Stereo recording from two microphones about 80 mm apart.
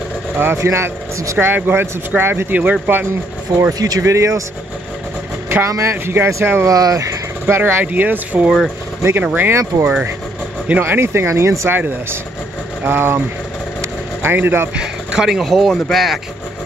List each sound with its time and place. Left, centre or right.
0.4 s speech: right
1.4 s speech: right
3.7 s speech: right
4.0 s speech: right
5.5 s speech: right
6.6 s speech: right
7.4 s speech: right
9.5 s speech: right
13.7 s vehicle: right
14.8 s speech: centre